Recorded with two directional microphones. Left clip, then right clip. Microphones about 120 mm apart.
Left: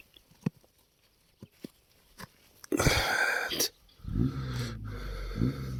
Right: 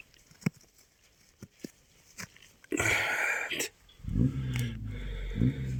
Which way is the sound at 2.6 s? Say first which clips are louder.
Left 1 dB; 30° left (ahead or behind).